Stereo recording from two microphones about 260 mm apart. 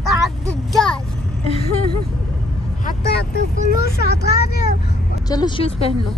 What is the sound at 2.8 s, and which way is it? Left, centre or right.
Speech, left.